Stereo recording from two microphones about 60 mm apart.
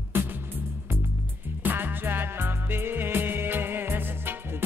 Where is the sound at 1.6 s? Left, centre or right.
Right.